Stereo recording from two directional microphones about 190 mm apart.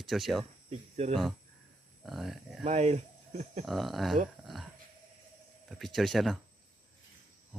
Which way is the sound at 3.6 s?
Centre (ahead or behind).